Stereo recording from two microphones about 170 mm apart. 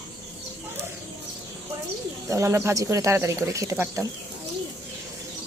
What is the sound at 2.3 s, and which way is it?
Speech, 15° right (ahead or behind).